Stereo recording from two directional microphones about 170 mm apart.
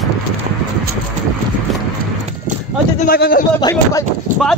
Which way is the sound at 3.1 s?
65° left (ahead or behind).